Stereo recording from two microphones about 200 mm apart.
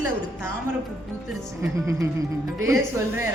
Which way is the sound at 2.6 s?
15° right (ahead or behind).